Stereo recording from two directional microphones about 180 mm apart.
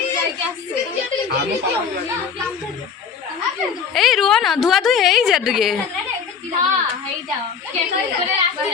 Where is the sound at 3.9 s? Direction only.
Centre (ahead or behind).